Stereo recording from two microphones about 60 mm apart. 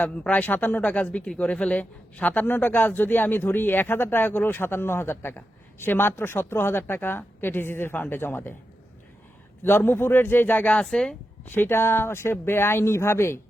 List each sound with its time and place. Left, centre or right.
0.0 s a man's voice: left
9.6 s a man's voice: left
10.8 s speech: centre
11.4 s speech: left